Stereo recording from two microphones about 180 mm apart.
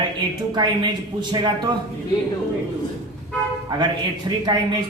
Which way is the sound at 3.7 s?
25° right (ahead or behind).